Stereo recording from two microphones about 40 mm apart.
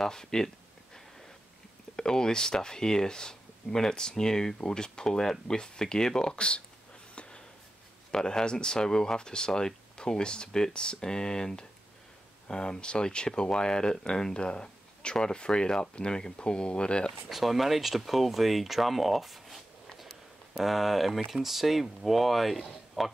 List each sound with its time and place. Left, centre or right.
0.0 s speech: centre
2.0 s speech: centre
6.3 s speech: left
7.2 s a sound: left
8.1 s speech: centre
17.3 s speech: centre